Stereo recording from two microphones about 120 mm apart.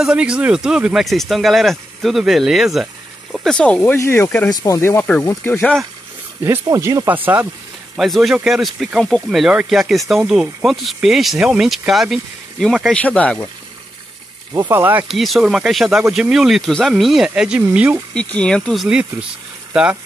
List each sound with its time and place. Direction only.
0.0 s speech: 5° right (ahead or behind)
3.4 s speech: 10° left (ahead or behind); by 5.5 s 25° left (ahead or behind)
5.5 s speech: 5° left (ahead or behind)
6.6 s speech: 25° right (ahead or behind)
7.9 s speech: 5° right (ahead or behind)
14.7 s speech: 15° right (ahead or behind)
15.0 s speech: centre (ahead or behind)
18.1 s speech: 10° left (ahead or behind)
18.9 s speech: 10° right (ahead or behind)